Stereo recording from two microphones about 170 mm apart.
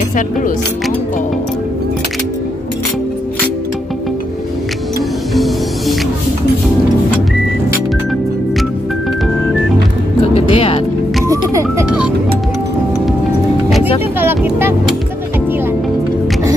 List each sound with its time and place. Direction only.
5.3 s music: centre (ahead or behind)
10.3 s music: 35° left (ahead or behind)
14.2 s vehicle: 15° right (ahead or behind)